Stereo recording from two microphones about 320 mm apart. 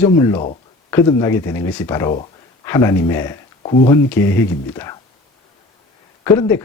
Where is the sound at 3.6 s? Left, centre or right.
Left.